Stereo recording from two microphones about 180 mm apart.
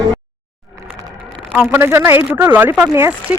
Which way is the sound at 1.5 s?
5° right (ahead or behind).